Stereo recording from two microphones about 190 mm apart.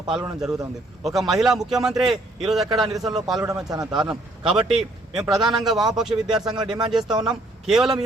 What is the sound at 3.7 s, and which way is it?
Speech, 20° right (ahead or behind).